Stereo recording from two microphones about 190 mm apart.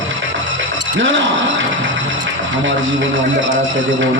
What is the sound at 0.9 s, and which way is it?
Speech, 80° right.